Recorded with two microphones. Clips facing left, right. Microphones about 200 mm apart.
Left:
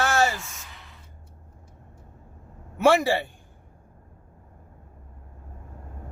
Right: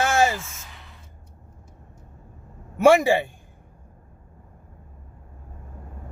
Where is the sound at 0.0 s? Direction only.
20° right (ahead or behind).